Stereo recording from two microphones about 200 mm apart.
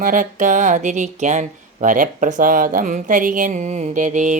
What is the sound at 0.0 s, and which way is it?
Speech, 40° right (ahead or behind).